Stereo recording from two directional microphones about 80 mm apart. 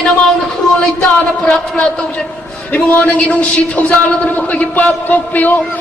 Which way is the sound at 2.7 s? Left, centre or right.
Centre.